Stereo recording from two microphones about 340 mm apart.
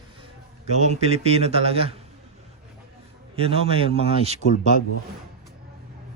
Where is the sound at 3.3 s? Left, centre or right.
Centre.